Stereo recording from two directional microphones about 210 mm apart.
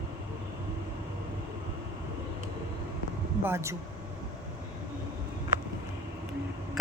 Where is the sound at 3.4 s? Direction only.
10° right (ahead or behind).